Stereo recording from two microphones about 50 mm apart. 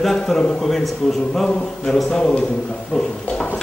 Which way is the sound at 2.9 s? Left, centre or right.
Centre.